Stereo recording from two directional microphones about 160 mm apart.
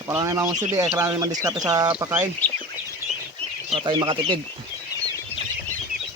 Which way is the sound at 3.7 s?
30° right (ahead or behind).